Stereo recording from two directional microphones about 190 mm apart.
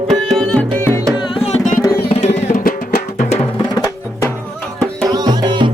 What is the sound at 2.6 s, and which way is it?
Music, 45° left (ahead or behind).